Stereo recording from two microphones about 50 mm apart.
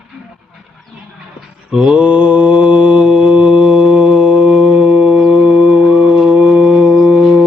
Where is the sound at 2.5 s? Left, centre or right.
Centre.